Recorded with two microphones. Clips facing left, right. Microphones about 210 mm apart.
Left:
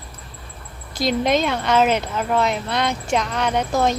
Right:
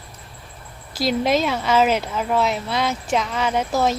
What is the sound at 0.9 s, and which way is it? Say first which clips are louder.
Speech: even; 5° right (ahead or behind).